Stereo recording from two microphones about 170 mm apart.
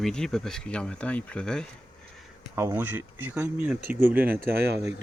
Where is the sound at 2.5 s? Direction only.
15° right (ahead or behind).